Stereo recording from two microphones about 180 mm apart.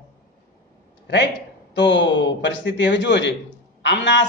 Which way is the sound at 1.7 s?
80° left.